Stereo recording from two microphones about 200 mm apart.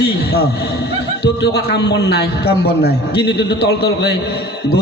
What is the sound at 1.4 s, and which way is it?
A man's voice, 55° left (ahead or behind).